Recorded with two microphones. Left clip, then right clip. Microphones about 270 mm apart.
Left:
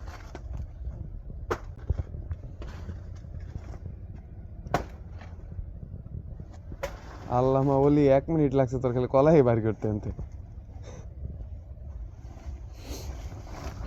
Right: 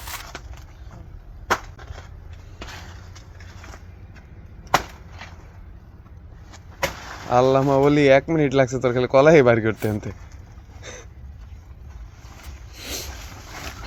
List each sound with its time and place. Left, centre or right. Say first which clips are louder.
7.3 s speech: right 8 dB; right
7.6 s speech: right 6 dB; right
7.9 s speech: right 6 dB; right
10.8 s a sound: right 10 dB; right
12.7 s vehicle: right 11 dB; right